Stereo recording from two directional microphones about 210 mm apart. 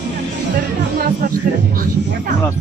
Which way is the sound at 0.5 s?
45° right (ahead or behind).